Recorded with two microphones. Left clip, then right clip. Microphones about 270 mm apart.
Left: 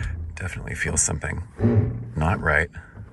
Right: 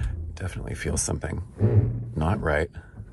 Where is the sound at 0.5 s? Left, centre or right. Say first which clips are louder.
Left 5 dB; centre.